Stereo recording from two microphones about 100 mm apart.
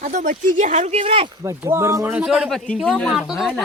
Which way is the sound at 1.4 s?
30° right (ahead or behind).